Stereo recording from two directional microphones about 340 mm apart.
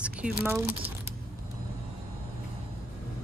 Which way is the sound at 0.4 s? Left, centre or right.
Centre.